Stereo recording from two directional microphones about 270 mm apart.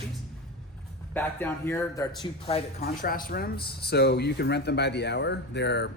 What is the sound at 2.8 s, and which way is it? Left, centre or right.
Speech, left.